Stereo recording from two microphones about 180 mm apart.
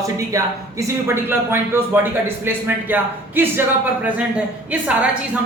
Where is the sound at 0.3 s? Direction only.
15° right (ahead or behind).